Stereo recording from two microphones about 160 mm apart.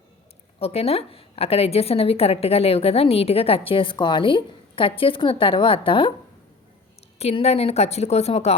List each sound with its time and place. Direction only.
0.6 s a woman's voice: 40° left (ahead or behind)
7.2 s a woman's voice: 40° left (ahead or behind)